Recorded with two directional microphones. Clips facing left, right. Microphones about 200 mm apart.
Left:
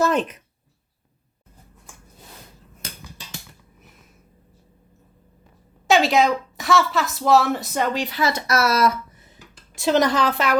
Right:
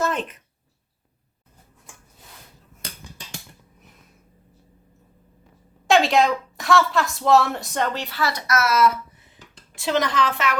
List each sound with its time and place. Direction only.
5.9 s a woman's voice: centre (ahead or behind); by 10.6 s 35° left (ahead or behind)